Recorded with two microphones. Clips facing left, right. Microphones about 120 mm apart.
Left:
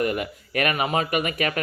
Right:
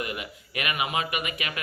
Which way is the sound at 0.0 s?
45° left (ahead or behind).